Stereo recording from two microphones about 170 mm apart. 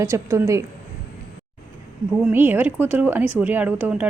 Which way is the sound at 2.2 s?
10° right (ahead or behind).